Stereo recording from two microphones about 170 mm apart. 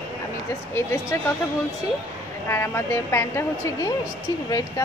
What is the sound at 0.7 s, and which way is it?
Speech, 15° left (ahead or behind).